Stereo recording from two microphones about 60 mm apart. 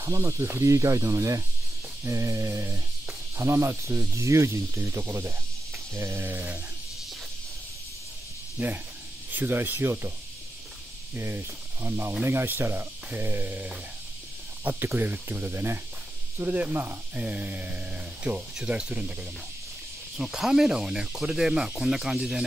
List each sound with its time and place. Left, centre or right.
0.0 s speech: right
6.2 s speech: right
8.6 s speech: right
11.1 s speech: right
16.4 s speech: right
20.2 s speech: centre